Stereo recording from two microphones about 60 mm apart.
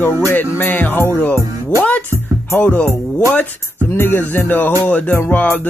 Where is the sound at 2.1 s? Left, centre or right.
Right.